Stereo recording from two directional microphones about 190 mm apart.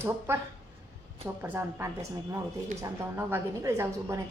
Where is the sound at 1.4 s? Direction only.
10° right (ahead or behind).